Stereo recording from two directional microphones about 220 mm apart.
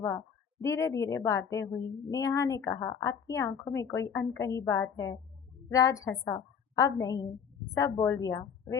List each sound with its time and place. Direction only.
0.6 s a woman's voice: 15° left (ahead or behind)